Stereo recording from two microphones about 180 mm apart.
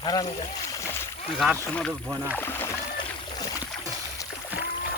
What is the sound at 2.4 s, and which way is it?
Splash, 10° left (ahead or behind).